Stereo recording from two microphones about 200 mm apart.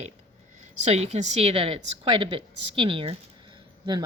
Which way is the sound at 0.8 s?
35° right (ahead or behind).